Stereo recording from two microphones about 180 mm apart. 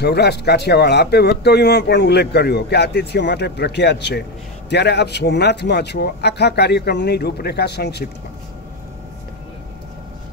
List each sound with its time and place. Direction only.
0.0 s speech: 65° left (ahead or behind)